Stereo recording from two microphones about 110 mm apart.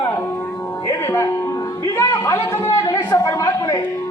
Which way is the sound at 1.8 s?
30° left (ahead or behind).